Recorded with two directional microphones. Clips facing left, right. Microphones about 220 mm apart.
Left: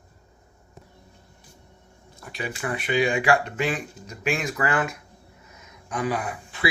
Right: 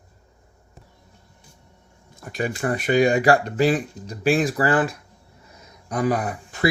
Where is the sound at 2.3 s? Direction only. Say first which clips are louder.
Right 6 dB; 45° right (ahead or behind).